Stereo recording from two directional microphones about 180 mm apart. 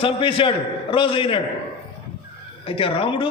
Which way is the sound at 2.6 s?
30° left (ahead or behind).